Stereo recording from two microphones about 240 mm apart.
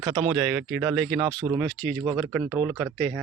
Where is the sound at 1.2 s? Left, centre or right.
Centre.